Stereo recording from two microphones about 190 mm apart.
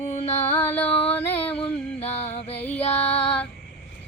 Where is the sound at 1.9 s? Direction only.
30° left (ahead or behind).